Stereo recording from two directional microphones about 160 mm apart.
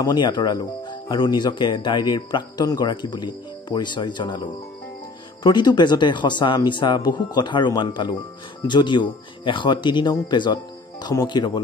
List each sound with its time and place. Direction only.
0.0 s speech: 30° left (ahead or behind)